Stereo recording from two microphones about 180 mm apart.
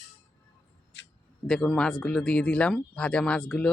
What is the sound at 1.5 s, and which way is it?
Speech, 5° left (ahead or behind).